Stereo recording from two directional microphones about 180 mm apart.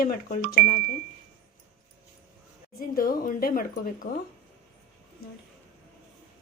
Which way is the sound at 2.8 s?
50° left (ahead or behind).